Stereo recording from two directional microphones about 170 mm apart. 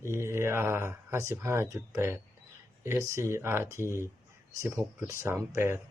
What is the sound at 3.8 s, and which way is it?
Speech, 15° left (ahead or behind).